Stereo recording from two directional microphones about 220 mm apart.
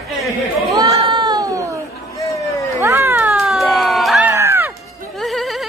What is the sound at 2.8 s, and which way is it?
Cat, 10° right (ahead or behind).